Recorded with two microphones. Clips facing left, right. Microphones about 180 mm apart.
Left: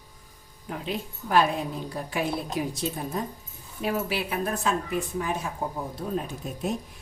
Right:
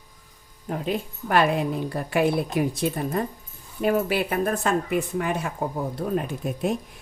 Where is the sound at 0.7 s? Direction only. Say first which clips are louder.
Right 5 dB; 50° right (ahead or behind).